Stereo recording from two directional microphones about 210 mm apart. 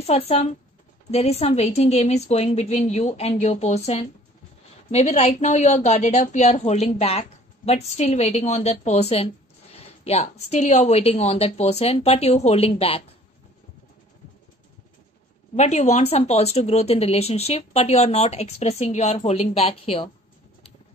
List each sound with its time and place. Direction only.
0.0 s a woman's voice: 30° left (ahead or behind)
15.5 s speech: 35° left (ahead or behind)